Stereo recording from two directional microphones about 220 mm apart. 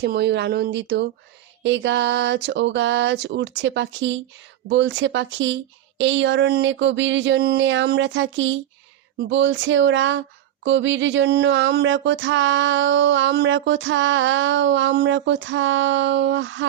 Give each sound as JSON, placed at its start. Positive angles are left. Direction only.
{"t": 0.0, "sound": "speech", "side_deg": -50}